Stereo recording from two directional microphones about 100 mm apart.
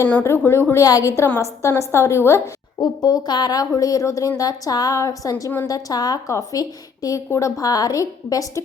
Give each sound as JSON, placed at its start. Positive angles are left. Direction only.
{"t": 0.1, "sound": "a woman's voice", "side_deg": 20}
{"t": 2.8, "sound": "a woman's voice", "side_deg": 45}